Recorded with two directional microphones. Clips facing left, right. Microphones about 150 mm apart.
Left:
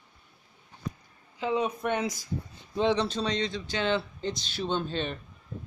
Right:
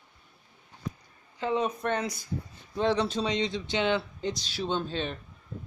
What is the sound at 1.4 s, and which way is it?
Speech, 5° left (ahead or behind).